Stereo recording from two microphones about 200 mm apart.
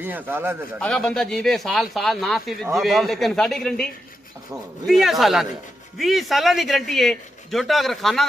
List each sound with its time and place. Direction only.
0.0 s speech: 10° right (ahead or behind)
0.7 s speech: 5° left (ahead or behind)